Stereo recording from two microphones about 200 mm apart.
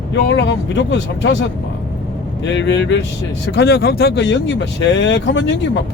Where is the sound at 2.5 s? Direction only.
65° left (ahead or behind).